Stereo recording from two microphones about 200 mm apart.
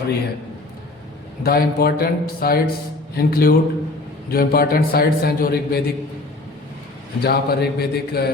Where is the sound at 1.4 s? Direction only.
50° left (ahead or behind).